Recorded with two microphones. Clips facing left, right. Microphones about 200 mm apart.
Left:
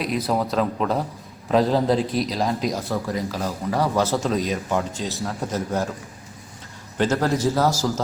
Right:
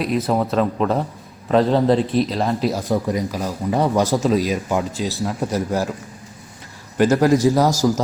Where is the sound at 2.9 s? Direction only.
20° right (ahead or behind).